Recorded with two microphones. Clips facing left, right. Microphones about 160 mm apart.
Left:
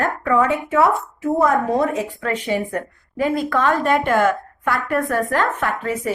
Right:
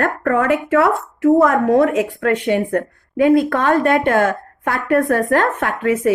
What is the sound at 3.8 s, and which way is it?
A woman's voice, 50° right (ahead or behind).